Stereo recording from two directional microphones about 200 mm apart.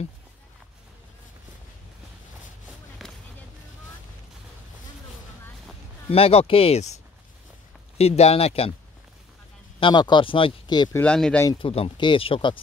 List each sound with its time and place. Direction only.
6.1 s speech: 30° left (ahead or behind)
8.0 s speech: 30° left (ahead or behind)
9.8 s speech: 25° left (ahead or behind)
11.0 s speech: 5° left (ahead or behind)
11.4 s speech: 25° left (ahead or behind)